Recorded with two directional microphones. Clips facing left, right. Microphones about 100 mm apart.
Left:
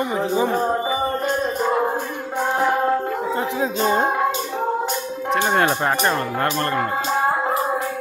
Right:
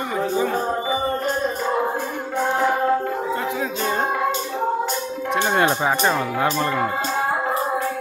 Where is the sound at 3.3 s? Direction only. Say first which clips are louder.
Left 2 dB; 25° left (ahead or behind).